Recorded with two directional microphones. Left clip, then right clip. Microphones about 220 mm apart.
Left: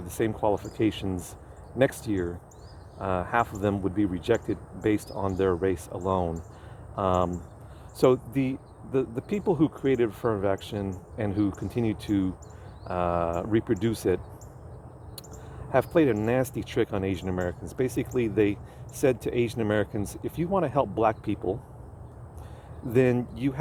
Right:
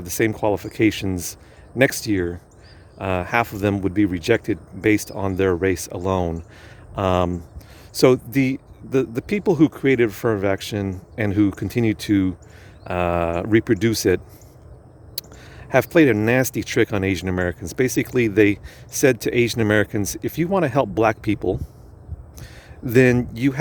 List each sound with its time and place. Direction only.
0.0 s speech: 45° right (ahead or behind)
15.7 s speech: 45° right (ahead or behind)
22.9 s speech: 45° right (ahead or behind)